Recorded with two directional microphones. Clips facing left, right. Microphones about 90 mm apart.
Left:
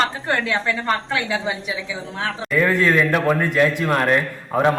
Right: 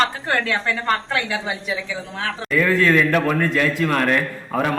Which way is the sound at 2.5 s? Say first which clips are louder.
Right 1 dB; 20° left (ahead or behind).